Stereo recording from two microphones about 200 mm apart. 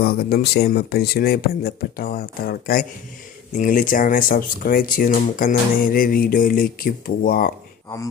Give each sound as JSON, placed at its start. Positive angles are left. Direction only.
{"t": 0.0, "sound": "speech", "side_deg": 50}